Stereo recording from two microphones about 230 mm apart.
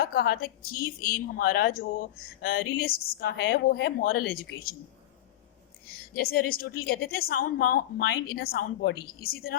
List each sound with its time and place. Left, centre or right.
0.0 s speech: left
6.1 s speech: left